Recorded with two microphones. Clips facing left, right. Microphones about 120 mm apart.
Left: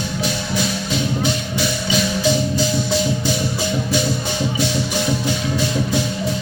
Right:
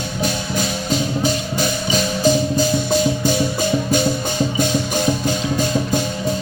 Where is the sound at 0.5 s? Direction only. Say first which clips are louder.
Right 1 dB; 45° right (ahead or behind).